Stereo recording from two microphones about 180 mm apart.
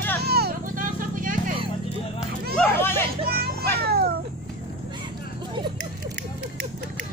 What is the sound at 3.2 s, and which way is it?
Children playing, 60° right (ahead or behind).